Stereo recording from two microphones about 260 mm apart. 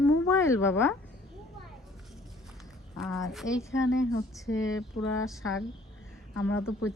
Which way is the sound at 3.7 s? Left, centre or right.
Left.